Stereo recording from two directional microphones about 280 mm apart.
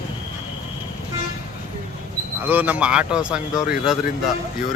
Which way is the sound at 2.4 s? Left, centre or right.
Centre.